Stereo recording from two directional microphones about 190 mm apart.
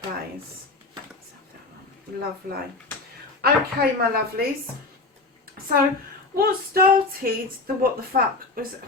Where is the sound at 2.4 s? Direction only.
50° right (ahead or behind).